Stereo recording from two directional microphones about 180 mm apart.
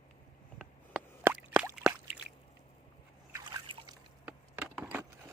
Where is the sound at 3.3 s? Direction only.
20° right (ahead or behind).